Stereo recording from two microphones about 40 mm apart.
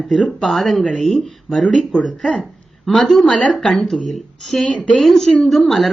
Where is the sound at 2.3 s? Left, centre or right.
Centre.